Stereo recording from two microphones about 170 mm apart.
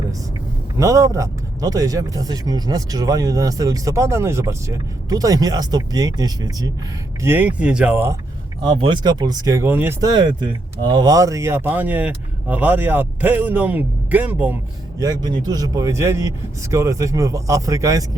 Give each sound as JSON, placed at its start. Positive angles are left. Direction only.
{"t": 0.8, "sound": "speech", "side_deg": -20}
{"t": 7.2, "sound": "speech", "side_deg": -10}
{"t": 8.6, "sound": "speech", "side_deg": -25}
{"t": 10.8, "sound": "speech", "side_deg": -25}